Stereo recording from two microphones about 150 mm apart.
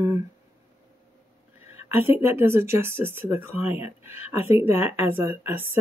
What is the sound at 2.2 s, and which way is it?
Speech, 15° right (ahead or behind).